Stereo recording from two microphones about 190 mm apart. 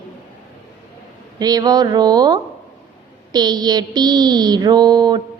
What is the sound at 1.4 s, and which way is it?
Child singing, 20° right (ahead or behind).